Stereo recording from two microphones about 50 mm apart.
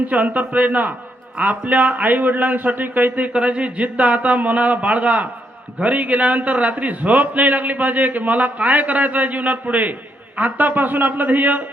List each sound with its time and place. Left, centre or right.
0.1 s a man's voice: right